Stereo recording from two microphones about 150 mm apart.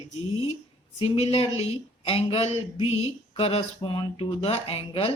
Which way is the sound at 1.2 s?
40° left (ahead or behind).